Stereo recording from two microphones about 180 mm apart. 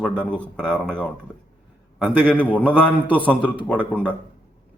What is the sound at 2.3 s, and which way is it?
Speech, 5° left (ahead or behind).